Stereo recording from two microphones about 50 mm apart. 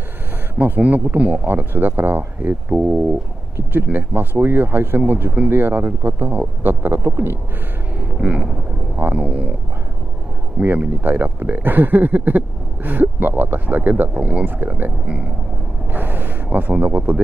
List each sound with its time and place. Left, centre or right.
0.6 s speech: right
1.5 s speech: right
2.7 s a sound: right
3.7 s speech: right
5.0 s speech: right
5.5 s speech: right
8.0 s vehicle: right
8.9 s a sound: right
10.6 s speech: right
15.9 s gasp: right
16.4 s speech: right